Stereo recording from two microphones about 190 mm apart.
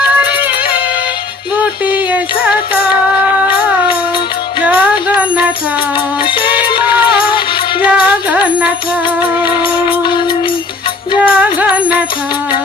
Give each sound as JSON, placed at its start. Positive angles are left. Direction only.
{"t": 1.9, "sound": "music", "side_deg": -10}
{"t": 4.6, "sound": "music", "side_deg": -10}
{"t": 6.7, "sound": "music", "side_deg": 25}
{"t": 7.9, "sound": "music", "side_deg": -10}
{"t": 9.4, "sound": "music", "side_deg": 25}
{"t": 11.2, "sound": "music", "side_deg": -5}